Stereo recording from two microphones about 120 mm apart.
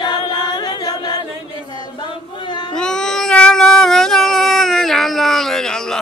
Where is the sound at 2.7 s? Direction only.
5° left (ahead or behind).